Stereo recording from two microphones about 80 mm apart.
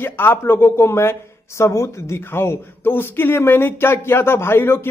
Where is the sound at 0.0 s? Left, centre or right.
Left.